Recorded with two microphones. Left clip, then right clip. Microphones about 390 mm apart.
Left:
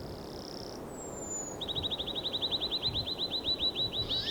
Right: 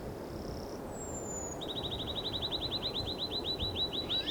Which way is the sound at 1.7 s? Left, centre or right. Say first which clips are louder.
Left 5 dB; centre.